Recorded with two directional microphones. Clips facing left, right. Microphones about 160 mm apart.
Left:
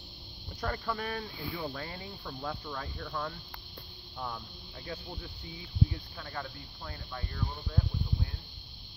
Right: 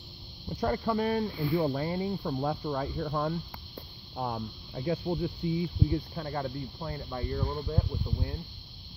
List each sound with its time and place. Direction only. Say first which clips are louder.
0.6 s speech: right 7 dB; 25° right (ahead or behind)